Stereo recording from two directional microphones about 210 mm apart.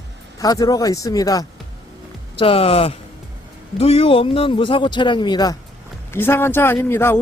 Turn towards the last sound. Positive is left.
turn(degrees=10)  # may be behind; listen again after turning